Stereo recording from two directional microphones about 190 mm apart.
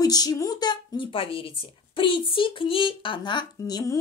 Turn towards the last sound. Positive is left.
turn(degrees=20)  # may be behind; listen again after turning